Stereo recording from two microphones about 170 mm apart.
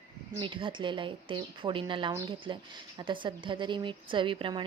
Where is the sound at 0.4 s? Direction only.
30° right (ahead or behind).